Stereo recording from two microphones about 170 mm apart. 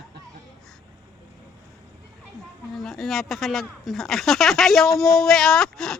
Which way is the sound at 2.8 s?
Centre (ahead or behind).